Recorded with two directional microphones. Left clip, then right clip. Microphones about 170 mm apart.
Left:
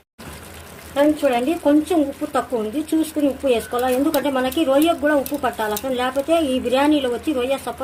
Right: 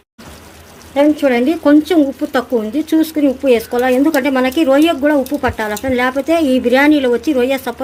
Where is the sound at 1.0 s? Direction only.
40° right (ahead or behind).